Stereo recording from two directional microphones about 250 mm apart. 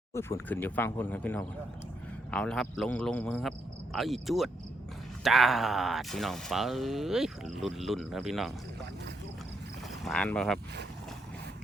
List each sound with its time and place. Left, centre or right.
0.1 s speech: centre
10.0 s speech: centre